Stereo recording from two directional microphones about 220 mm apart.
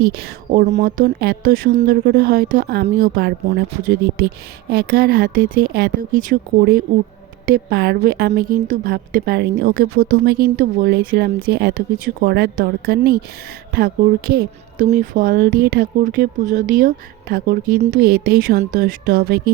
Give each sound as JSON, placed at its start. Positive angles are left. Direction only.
{"t": 0.0, "sound": "a woman's voice", "side_deg": -45}